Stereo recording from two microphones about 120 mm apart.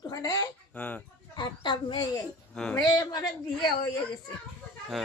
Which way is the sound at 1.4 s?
40° left (ahead or behind).